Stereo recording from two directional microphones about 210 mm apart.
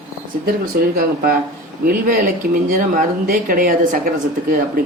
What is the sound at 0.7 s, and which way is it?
Speech, 45° right (ahead or behind).